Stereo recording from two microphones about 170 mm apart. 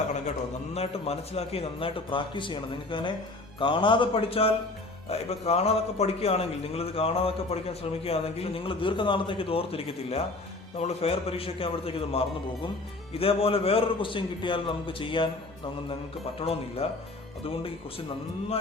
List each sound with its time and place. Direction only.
0.1 s a man's voice: 40° left (ahead or behind)
16.4 s a man's voice: 35° left (ahead or behind)